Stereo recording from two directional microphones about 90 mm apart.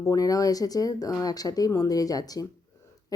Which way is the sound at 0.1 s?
40° left (ahead or behind).